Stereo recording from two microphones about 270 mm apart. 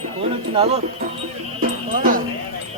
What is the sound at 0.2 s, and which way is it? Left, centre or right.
Speech, right.